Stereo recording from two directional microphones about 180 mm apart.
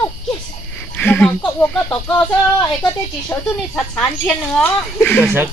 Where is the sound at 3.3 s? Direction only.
15° left (ahead or behind).